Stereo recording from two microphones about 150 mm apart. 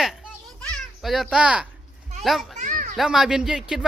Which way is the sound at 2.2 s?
Centre (ahead or behind).